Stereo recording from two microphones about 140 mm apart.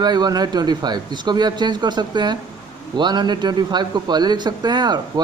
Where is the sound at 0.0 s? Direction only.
30° right (ahead or behind).